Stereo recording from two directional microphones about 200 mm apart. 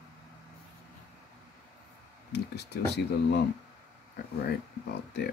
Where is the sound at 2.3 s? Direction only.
55° left (ahead or behind).